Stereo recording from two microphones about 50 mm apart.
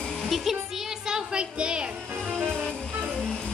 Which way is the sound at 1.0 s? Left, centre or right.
Centre.